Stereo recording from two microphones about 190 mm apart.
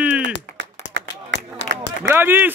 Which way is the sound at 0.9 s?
70° right (ahead or behind).